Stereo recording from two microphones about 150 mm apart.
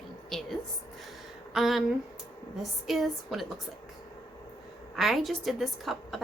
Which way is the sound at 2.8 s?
Centre (ahead or behind).